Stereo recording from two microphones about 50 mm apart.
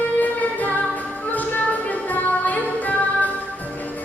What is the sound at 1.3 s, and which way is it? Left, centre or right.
Music, left.